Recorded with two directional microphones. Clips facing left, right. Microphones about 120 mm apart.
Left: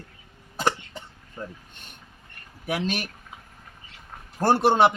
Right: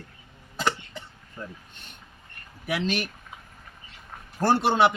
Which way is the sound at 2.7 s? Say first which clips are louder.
Even; 45° left (ahead or behind).